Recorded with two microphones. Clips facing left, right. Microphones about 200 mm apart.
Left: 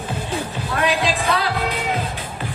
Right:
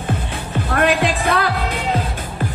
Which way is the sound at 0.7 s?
55° right (ahead or behind).